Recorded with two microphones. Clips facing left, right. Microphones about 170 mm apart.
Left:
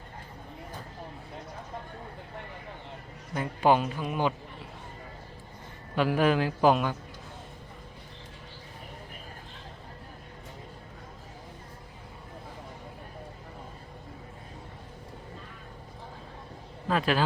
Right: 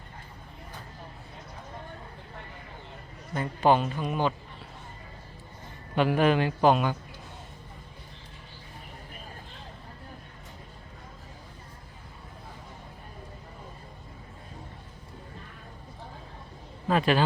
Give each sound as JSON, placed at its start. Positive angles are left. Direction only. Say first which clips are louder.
{"t": 3.3, "sound": "a woman's voice", "louder": "right 1 dB", "side_deg": 10}
{"t": 6.0, "sound": "a man's voice", "louder": "right 1 dB", "side_deg": 0}
{"t": 16.9, "sound": "a man's voice", "louder": "right 3 dB", "side_deg": 0}